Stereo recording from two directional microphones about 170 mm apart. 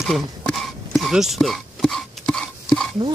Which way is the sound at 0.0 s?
Centre (ahead or behind).